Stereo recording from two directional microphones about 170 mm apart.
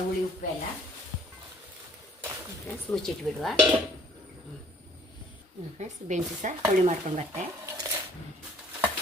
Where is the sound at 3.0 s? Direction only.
Centre (ahead or behind).